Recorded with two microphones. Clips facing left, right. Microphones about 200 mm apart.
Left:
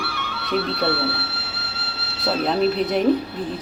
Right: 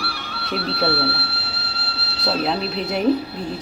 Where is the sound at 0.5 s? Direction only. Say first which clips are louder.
Left 1 dB; 35° right (ahead or behind).